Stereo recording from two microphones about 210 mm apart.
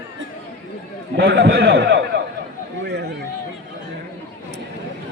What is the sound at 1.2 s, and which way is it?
Speech, 50° right (ahead or behind).